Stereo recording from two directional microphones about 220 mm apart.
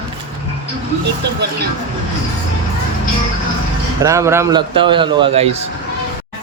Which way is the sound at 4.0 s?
15° right (ahead or behind).